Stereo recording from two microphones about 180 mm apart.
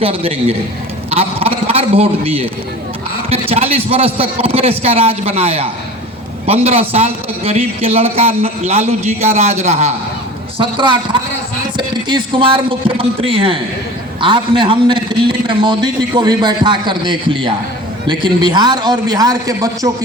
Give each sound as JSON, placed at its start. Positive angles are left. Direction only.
{"t": 0.0, "sound": "a man's voice", "side_deg": -30}
{"t": 10.6, "sound": "a man's voice", "side_deg": -25}